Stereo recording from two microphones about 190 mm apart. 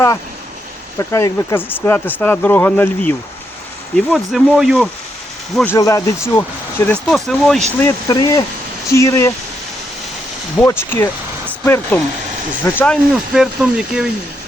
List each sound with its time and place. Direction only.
0.9 s speech: 15° left (ahead or behind); by 4.9 s 5° right (ahead or behind)
5.5 s speech: 10° left (ahead or behind)
7.8 s speech: 15° left (ahead or behind)
10.6 s speech: 10° left (ahead or behind)